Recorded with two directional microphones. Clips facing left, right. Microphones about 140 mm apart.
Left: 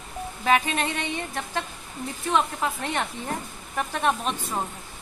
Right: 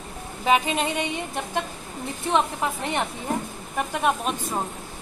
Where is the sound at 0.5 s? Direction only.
15° right (ahead or behind).